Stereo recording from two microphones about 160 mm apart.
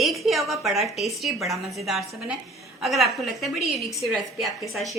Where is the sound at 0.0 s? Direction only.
Centre (ahead or behind).